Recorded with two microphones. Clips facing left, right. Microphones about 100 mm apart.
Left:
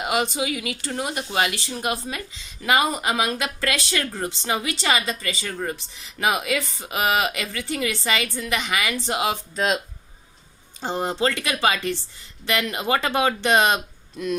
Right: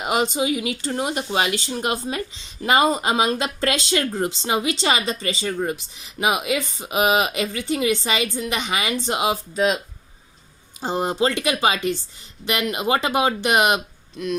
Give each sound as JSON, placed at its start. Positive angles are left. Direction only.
{"t": 0.0, "sound": "speech", "side_deg": -20}